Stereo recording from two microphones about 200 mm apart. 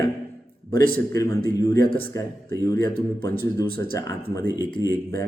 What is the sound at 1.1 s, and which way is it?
Speech, 15° left (ahead or behind).